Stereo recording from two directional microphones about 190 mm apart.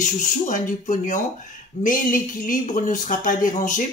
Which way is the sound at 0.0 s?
40° left (ahead or behind).